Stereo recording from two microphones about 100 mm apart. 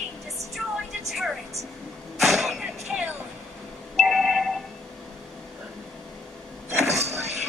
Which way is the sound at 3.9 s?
Centre (ahead or behind).